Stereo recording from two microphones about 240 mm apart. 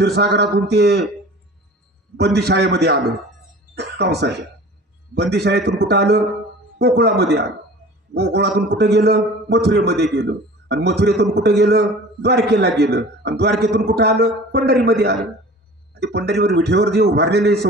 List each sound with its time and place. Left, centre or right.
0.0 s a man's voice: right
2.1 s a man's voice: right
4.0 s a man's voice: right